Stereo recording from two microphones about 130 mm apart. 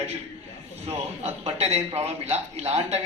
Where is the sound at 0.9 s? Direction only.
55° right (ahead or behind).